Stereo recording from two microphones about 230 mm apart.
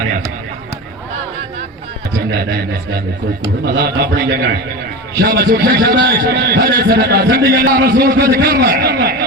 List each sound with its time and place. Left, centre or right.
2.3 s a man's voice: right